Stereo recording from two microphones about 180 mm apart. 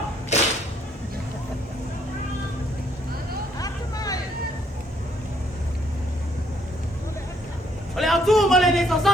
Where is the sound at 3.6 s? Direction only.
20° left (ahead or behind).